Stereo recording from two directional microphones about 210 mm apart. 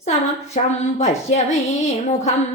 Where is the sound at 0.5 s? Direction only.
30° left (ahead or behind).